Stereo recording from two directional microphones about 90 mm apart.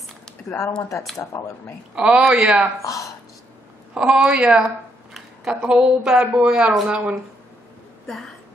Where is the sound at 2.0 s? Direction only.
10° right (ahead or behind).